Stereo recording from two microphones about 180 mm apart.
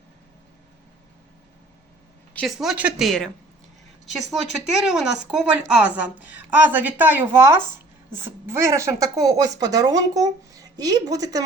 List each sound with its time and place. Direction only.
2.3 s a woman's voice: centre (ahead or behind); by 11.4 s 20° right (ahead or behind)